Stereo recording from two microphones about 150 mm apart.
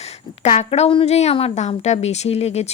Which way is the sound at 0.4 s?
45° left (ahead or behind).